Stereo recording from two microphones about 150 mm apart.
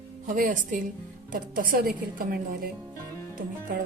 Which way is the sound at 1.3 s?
75° right (ahead or behind).